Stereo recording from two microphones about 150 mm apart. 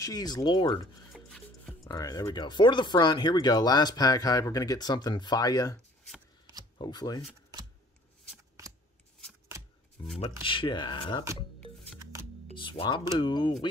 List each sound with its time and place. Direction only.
0.0 s speech: 25° left (ahead or behind)
1.1 s filing: 5° left (ahead or behind)
1.9 s speech: 20° left (ahead or behind)
6.8 s speech: 25° left (ahead or behind)
10.0 s speech: 35° left (ahead or behind)
11.6 s shuffling cards: 5° left (ahead or behind)
12.5 s speech: 35° left (ahead or behind)